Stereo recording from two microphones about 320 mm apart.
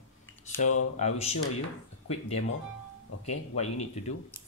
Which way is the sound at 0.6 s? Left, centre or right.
Left.